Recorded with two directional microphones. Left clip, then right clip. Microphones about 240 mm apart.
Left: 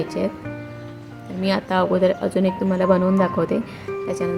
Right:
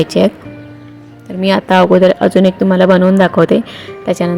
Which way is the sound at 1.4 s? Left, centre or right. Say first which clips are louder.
Right 10 dB; right.